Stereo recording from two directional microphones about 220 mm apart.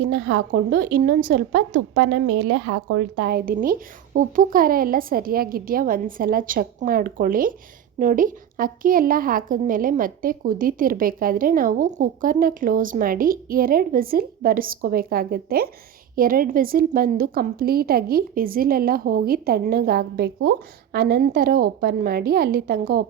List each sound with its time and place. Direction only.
0.0 s a woman's voice: 50° right (ahead or behind)